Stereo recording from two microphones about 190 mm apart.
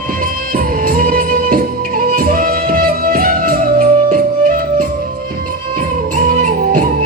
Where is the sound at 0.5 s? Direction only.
45° right (ahead or behind).